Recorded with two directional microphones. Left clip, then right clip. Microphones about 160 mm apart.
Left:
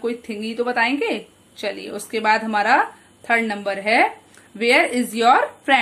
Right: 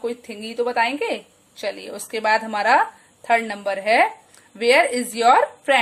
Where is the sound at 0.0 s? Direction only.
20° right (ahead or behind).